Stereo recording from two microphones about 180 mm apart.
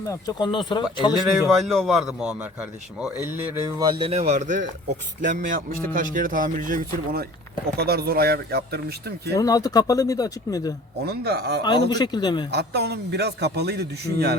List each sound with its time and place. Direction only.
0.0 s speech: 20° left (ahead or behind)
1.1 s a man's voice: centre (ahead or behind)
3.8 s speech: 25° right (ahead or behind); by 9.3 s 60° right (ahead or behind)
9.3 s speech: 20° left (ahead or behind)
11.0 s speech: 60° right (ahead or behind)
11.9 s speech: 25° left (ahead or behind)
12.5 s speech: 65° right (ahead or behind)